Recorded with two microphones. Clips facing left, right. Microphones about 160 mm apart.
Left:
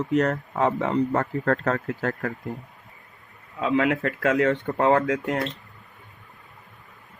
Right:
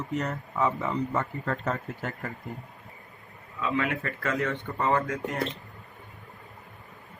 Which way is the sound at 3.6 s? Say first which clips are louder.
Left 6 dB; 75° left (ahead or behind).